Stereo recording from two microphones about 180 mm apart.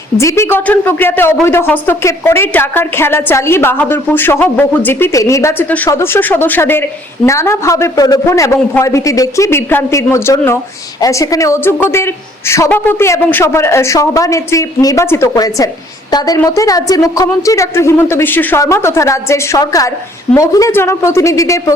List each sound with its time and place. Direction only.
0.2 s a woman's voice: 15° left (ahead or behind)